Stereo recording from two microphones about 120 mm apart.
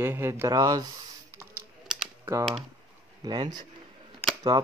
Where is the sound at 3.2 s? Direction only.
40° right (ahead or behind).